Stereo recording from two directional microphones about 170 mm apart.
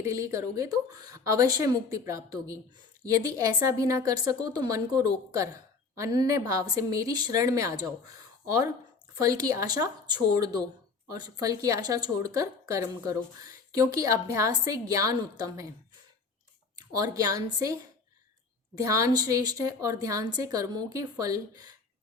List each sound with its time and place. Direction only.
0.0 s a woman's voice: 15° right (ahead or behind)
16.7 s a woman's voice: 20° right (ahead or behind)